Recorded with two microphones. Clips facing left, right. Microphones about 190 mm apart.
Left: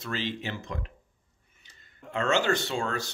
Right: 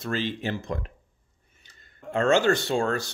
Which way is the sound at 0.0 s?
45° right (ahead or behind).